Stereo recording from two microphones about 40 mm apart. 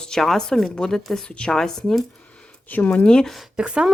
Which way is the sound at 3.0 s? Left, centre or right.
Left.